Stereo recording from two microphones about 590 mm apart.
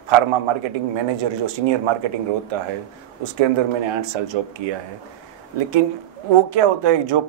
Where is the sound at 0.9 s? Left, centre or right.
Right.